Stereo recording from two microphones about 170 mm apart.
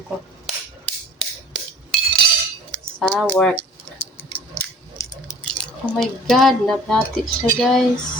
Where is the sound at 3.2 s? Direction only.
5° left (ahead or behind).